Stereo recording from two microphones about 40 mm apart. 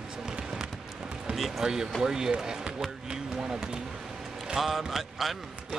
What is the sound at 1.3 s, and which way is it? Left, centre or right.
Speech, centre.